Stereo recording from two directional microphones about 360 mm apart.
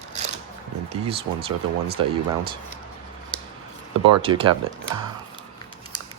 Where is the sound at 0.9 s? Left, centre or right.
Centre.